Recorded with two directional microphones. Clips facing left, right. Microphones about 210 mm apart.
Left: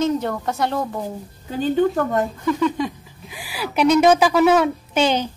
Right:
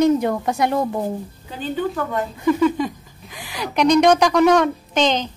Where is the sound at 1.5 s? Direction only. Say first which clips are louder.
Left 5 dB; 45° left (ahead or behind).